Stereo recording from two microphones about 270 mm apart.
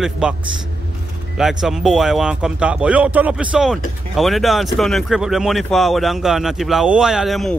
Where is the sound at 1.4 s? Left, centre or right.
Centre.